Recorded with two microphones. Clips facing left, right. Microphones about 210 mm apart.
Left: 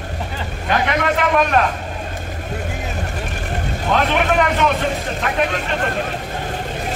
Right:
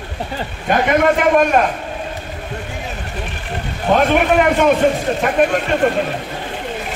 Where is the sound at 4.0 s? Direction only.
50° right (ahead or behind).